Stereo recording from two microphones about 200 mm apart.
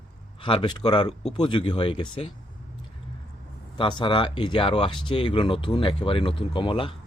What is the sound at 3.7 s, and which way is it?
Speech, 25° left (ahead or behind).